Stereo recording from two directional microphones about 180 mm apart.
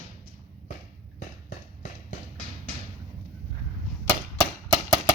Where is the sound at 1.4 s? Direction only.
40° left (ahead or behind).